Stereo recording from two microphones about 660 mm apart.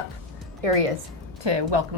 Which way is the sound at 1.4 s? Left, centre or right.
Right.